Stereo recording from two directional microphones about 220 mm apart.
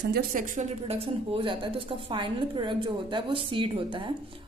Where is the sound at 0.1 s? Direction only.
40° right (ahead or behind).